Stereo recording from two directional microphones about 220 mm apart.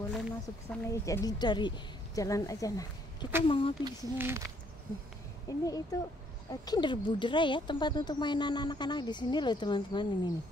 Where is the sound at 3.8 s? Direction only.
10° right (ahead or behind).